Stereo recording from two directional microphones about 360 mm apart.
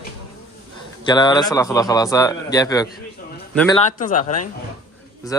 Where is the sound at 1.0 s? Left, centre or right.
Centre.